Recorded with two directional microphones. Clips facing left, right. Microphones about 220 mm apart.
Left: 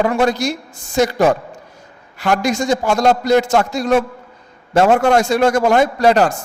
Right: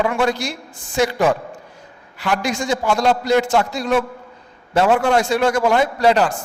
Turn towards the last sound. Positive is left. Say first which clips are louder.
# left 3 dB
turn(degrees=45)  # may be behind; listen again after turning